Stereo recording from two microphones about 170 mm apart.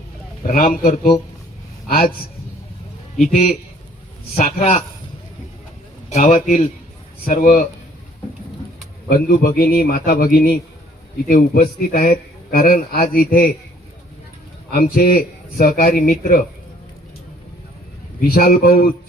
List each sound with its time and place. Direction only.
0.4 s a man's voice: 55° left (ahead or behind)
3.3 s a man's voice: 40° left (ahead or behind)
6.1 s a man's voice: 45° left (ahead or behind)
9.0 s a man's voice: 60° left (ahead or behind)
14.7 s a man's voice: 60° left (ahead or behind)
18.2 s a man's voice: 60° left (ahead or behind)